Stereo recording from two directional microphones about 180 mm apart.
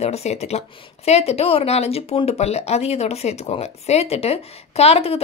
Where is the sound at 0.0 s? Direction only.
35° left (ahead or behind).